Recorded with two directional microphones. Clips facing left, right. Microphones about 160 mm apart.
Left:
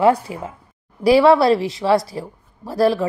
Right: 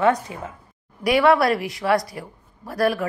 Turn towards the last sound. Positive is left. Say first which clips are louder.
# left 4 dB
turn(degrees=30)  # may be behind; listen again after turning